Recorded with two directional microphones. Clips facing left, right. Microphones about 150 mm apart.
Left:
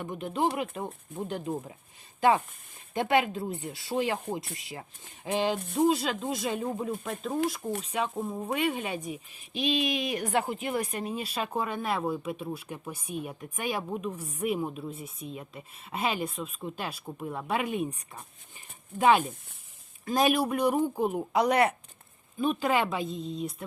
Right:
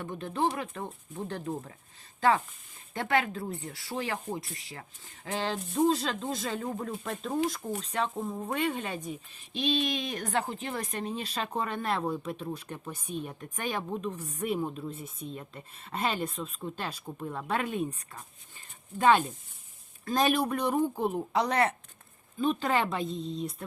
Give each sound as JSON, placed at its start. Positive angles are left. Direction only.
{"t": 0.0, "sound": "speech", "side_deg": 15}
{"t": 2.9, "sound": "speech", "side_deg": 20}